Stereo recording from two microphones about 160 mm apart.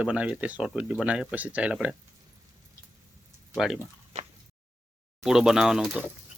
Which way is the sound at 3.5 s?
Centre (ahead or behind).